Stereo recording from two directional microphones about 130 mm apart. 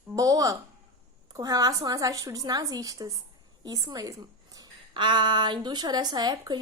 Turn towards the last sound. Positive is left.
turn(degrees=-35)  # may be behind; listen again after turning